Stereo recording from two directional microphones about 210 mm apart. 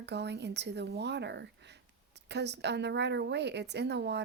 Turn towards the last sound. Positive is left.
turn(degrees=-55)  # may be behind; listen again after turning